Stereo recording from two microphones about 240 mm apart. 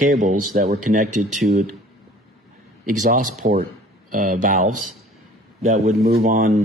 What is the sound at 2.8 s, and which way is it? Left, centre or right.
A man's voice, right.